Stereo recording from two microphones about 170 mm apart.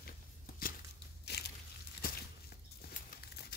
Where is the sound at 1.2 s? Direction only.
75° left (ahead or behind).